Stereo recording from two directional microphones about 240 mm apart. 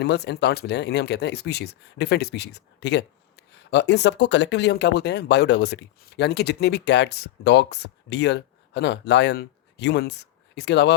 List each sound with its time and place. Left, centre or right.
0.0 s speech: left